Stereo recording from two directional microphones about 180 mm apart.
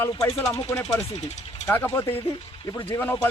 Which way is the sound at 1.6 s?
10° left (ahead or behind).